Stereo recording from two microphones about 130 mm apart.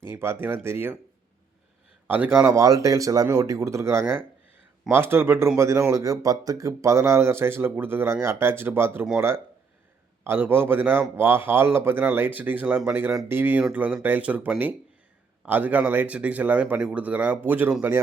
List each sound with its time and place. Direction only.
0.1 s speech: 20° right (ahead or behind)
2.0 s speech: 15° right (ahead or behind)